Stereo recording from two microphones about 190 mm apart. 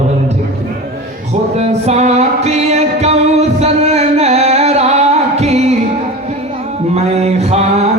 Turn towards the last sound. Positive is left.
turn(degrees=-35)  # may be behind; listen again after turning